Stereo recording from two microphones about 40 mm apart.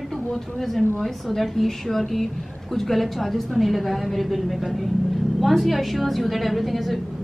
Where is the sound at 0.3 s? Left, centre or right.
Centre.